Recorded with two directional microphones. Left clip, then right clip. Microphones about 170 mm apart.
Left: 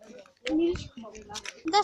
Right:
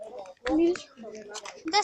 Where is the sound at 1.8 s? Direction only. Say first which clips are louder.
Left 1 dB; 40° left (ahead or behind).